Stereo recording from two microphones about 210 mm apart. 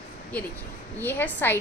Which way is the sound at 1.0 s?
10° left (ahead or behind).